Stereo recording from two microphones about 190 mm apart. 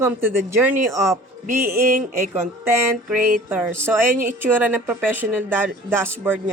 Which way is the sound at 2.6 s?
15° right (ahead or behind).